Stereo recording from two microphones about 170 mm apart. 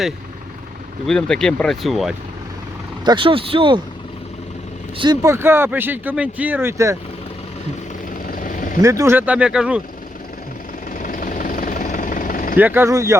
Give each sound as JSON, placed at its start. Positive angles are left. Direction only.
{"t": 1.0, "sound": "speech", "side_deg": 5}
{"t": 3.0, "sound": "speech", "side_deg": -30}
{"t": 4.9, "sound": "speech", "side_deg": -20}
{"t": 8.3, "sound": "vehicle", "side_deg": 55}
{"t": 8.8, "sound": "speech", "side_deg": -20}
{"t": 10.9, "sound": "vehicle", "side_deg": 50}
{"t": 12.5, "sound": "speech", "side_deg": -10}